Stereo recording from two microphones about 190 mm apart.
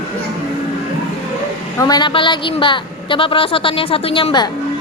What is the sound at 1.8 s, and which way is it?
A woman's voice, 20° left (ahead or behind).